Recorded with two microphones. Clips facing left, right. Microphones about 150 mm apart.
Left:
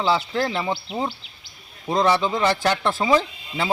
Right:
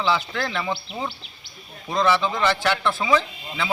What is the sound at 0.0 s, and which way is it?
Speech, 35° left (ahead or behind).